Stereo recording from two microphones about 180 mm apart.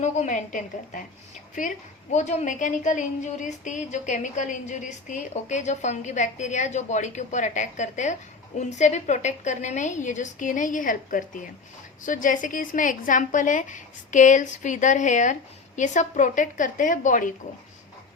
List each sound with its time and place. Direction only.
0.0 s a woman's voice: 40° left (ahead or behind)
2.1 s a woman's voice: 40° left (ahead or behind)